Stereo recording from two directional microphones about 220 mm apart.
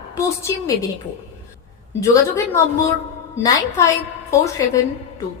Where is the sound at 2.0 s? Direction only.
15° left (ahead or behind).